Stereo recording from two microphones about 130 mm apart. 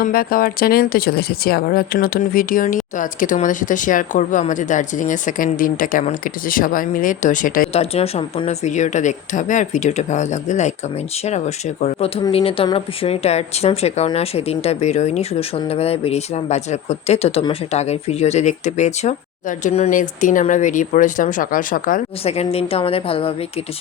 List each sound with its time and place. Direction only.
0.0 s speech: 90° left
2.0 s speech: 90° left
7.7 s speech: 50° left (ahead or behind)
19.9 s speech: 90° left
22.2 s speech: 50° left (ahead or behind)